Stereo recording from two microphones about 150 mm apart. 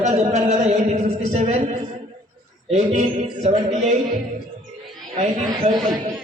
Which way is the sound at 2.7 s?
50° right (ahead or behind).